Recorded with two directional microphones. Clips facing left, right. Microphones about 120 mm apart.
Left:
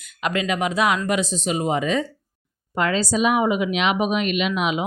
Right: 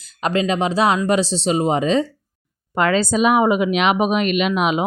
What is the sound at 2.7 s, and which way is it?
Speech, 60° right (ahead or behind).